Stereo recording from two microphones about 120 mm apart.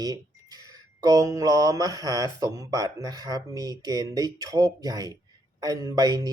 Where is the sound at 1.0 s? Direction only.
30° right (ahead or behind).